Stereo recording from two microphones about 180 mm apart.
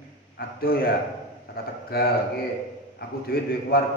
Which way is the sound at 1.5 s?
60° left (ahead or behind).